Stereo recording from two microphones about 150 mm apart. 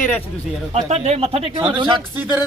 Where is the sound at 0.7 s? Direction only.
45° right (ahead or behind).